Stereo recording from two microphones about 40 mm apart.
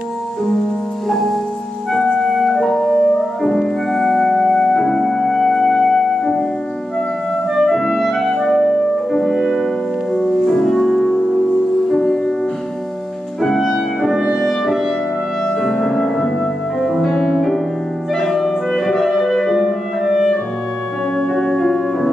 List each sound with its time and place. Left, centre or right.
1.0 s music: centre
7.5 s clarinet: centre
8.4 s music: centre
13.6 s music: centre
18.1 s clarinet: centre
21.3 s music: centre